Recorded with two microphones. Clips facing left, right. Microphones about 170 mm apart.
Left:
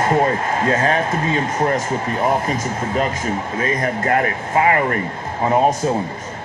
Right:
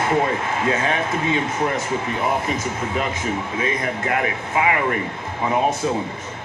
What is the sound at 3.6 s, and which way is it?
Speech, 45° left (ahead or behind).